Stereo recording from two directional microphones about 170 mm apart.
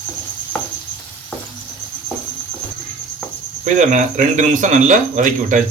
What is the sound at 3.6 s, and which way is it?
Speech, 45° right (ahead or behind).